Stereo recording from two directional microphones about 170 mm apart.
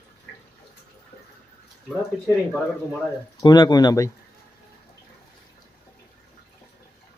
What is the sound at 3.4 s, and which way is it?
Speech, 25° left (ahead or behind).